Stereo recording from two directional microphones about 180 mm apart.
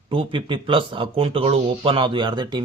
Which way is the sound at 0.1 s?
30° right (ahead or behind).